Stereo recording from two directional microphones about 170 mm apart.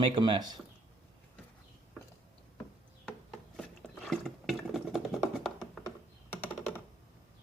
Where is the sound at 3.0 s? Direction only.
5° left (ahead or behind).